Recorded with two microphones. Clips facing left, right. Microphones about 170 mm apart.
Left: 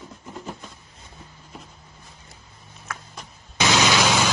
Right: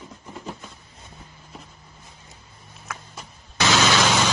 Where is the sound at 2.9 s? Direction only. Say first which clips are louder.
Even; 5° right (ahead or behind).